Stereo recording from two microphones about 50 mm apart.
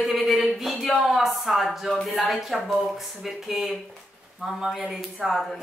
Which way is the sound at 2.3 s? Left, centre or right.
Centre.